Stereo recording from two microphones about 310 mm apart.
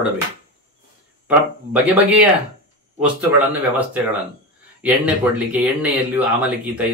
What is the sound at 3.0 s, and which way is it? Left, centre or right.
Speech, centre.